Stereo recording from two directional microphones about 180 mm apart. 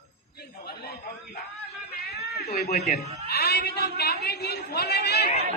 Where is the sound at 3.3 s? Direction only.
65° left (ahead or behind).